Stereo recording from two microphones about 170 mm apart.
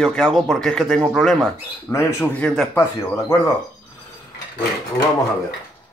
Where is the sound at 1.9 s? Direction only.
15° left (ahead or behind).